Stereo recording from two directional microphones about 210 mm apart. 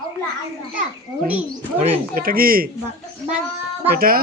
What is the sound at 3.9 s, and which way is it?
Speech, 45° right (ahead or behind).